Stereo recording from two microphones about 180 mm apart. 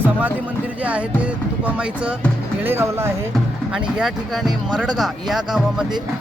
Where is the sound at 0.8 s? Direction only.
5° right (ahead or behind).